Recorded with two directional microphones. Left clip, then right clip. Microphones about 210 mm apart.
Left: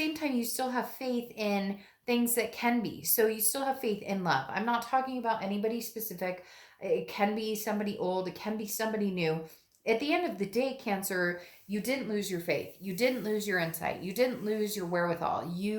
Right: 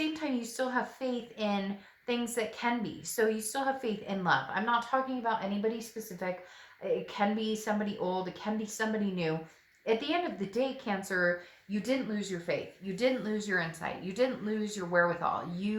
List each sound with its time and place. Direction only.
0.0 s a woman's voice: 35° left (ahead or behind)